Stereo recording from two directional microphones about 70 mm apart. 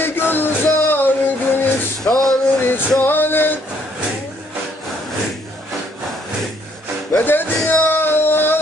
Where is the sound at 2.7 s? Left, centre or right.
Left.